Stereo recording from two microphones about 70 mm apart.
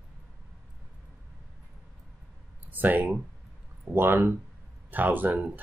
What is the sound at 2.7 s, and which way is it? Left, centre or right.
Speech, right.